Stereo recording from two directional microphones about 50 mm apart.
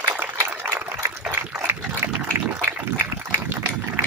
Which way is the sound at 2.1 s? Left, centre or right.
Right.